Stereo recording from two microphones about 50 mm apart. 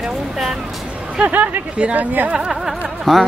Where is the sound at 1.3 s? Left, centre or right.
Right.